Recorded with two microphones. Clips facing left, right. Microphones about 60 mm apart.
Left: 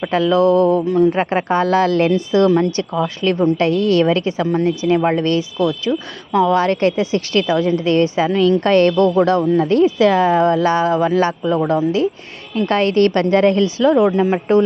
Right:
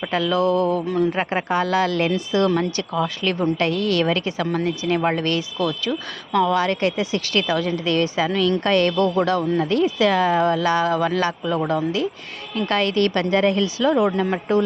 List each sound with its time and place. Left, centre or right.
0.1 s speech: left
0.9 s speech: centre
1.1 s speech: left
6.5 s speech: left
12.6 s speech: left